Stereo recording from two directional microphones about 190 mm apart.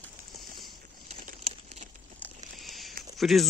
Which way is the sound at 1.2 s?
40° right (ahead or behind).